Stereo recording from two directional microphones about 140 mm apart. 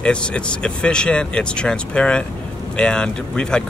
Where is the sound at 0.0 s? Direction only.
5° left (ahead or behind).